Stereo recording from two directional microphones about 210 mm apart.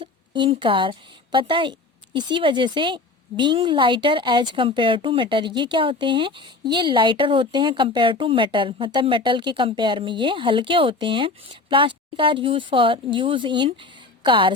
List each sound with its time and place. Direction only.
0.0 s a woman's voice: 25° right (ahead or behind)